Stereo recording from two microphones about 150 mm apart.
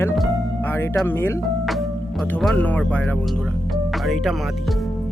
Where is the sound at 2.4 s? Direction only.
5° left (ahead or behind).